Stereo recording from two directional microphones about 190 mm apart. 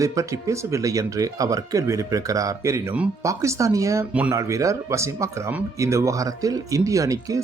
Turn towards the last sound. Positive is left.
turn(degrees=-15)  # may be behind; listen again after turning